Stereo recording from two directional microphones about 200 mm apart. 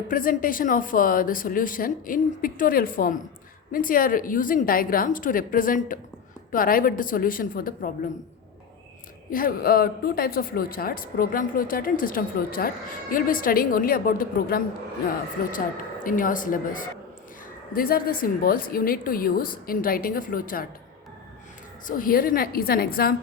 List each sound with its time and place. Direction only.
0.1 s speech: 45° left (ahead or behind)
9.3 s speech: 45° left (ahead or behind)
21.8 s speech: 45° left (ahead or behind)